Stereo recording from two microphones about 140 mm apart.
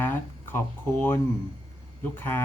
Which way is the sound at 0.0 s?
15° left (ahead or behind).